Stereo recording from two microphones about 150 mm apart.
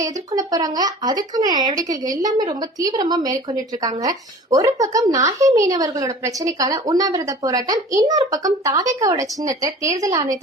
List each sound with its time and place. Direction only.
0.0 s speech: 25° right (ahead or behind)
4.5 s speech: 25° right (ahead or behind)